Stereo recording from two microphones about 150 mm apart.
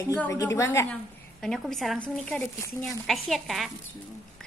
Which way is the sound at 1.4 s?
Centre (ahead or behind).